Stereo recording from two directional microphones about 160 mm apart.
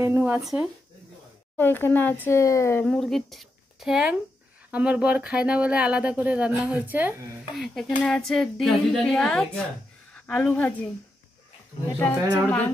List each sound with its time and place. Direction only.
0.0 s speech: 15° right (ahead or behind)
1.6 s speech: 10° left (ahead or behind)
2.9 s speech: centre (ahead or behind)
7.5 s a woman's voice: centre (ahead or behind)
12.0 s speech: 10° left (ahead or behind)